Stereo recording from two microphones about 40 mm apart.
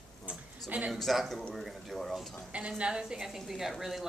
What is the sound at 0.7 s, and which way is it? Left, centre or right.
Speech, right.